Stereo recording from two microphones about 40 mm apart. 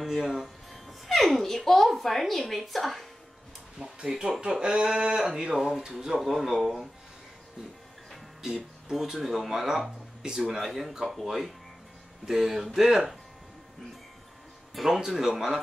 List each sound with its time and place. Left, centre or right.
0.0 s a child's voice: centre
4.0 s speech: centre
6.4 s speech: centre
8.4 s speech: centre
15.0 s speech: centre